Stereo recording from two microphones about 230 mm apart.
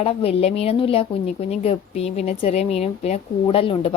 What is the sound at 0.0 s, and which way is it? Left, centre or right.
Speech, left.